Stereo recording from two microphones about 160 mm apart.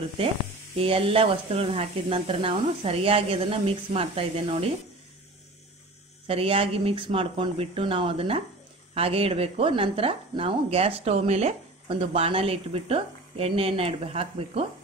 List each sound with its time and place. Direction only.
0.7 s speech: 35° right (ahead or behind)
6.2 s speech: 35° right (ahead or behind)